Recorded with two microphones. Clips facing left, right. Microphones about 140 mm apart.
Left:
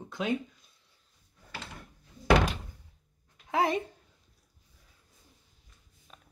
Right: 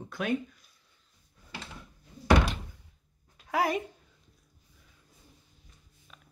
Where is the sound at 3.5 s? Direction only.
25° left (ahead or behind).